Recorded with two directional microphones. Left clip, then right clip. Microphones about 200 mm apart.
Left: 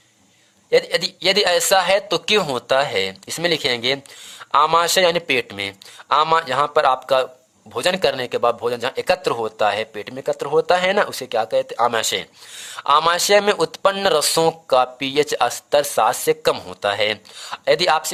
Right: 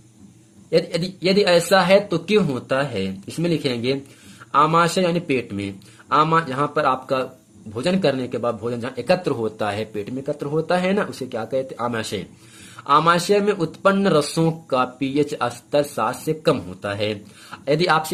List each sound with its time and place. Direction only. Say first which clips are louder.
0.7 s a man's voice: left 3 dB; 40° left (ahead or behind)